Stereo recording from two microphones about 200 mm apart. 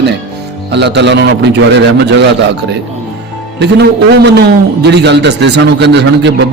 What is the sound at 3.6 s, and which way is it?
Speech, 60° right (ahead or behind).